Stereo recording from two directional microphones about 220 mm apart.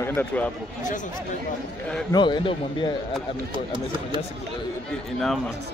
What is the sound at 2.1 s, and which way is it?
Speech, 20° left (ahead or behind).